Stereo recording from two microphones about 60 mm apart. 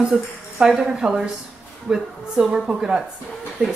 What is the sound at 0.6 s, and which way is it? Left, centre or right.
A woman's voice, centre.